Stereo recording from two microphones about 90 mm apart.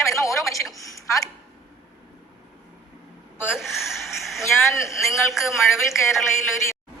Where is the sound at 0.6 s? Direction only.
Centre (ahead or behind).